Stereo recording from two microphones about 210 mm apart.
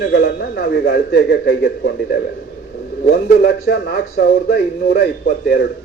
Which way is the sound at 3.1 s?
50° left (ahead or behind).